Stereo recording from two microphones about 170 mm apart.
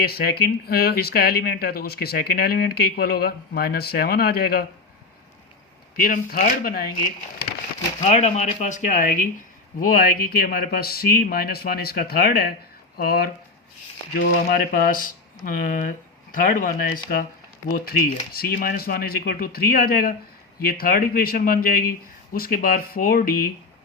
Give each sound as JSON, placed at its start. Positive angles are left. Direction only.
{"t": 0.0, "sound": "speech", "side_deg": 65}
{"t": 6.0, "sound": "speech", "side_deg": 55}
{"t": 8.0, "sound": "speech", "side_deg": 40}